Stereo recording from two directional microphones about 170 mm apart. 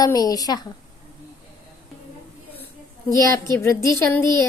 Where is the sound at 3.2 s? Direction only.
20° left (ahead or behind).